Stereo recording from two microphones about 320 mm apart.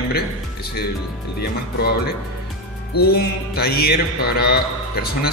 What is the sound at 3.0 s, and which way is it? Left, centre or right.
Speech, left.